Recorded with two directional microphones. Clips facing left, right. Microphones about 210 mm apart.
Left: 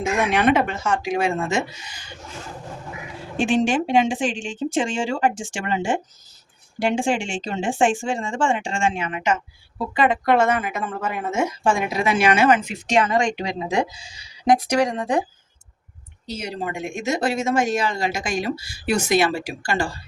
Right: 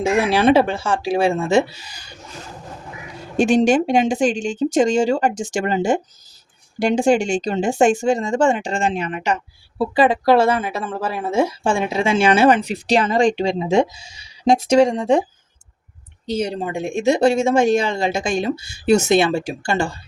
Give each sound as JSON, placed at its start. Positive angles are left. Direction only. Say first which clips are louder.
{"t": 0.0, "sound": "speech", "louder": "right 4 dB", "side_deg": -30}
{"t": 3.3, "sound": "a woman's voice", "louder": "right 5 dB", "side_deg": -40}
{"t": 16.2, "sound": "a woman's voice", "louder": "right 6 dB", "side_deg": -30}